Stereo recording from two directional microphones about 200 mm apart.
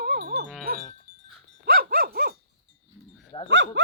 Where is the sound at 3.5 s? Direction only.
65° right (ahead or behind).